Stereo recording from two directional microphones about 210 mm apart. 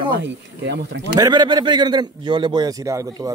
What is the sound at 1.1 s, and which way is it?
A man's voice, 20° right (ahead or behind).